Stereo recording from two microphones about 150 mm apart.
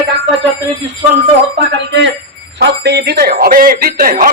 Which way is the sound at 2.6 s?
90° right.